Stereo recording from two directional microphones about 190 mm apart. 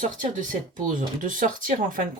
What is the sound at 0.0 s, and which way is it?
Speech, 45° right (ahead or behind).